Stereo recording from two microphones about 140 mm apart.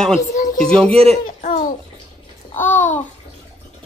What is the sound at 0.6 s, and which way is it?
Speech, 5° left (ahead or behind).